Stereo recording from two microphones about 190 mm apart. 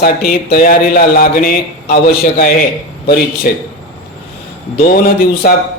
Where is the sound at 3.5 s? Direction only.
50° left (ahead or behind).